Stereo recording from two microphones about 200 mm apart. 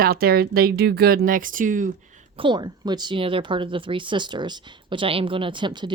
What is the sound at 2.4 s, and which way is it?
Speech, 25° right (ahead or behind).